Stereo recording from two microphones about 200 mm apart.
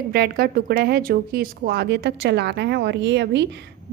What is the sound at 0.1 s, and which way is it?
Speech, 50° right (ahead or behind).